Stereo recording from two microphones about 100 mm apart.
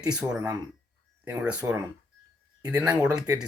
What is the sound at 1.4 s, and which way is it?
Speech, 10° right (ahead or behind).